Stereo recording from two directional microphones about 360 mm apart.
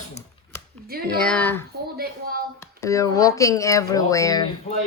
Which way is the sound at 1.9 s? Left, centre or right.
Right.